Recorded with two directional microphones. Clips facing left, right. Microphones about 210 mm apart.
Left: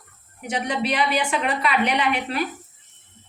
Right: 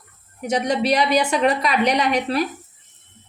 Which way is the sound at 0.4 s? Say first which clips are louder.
Right 5 dB; 40° right (ahead or behind).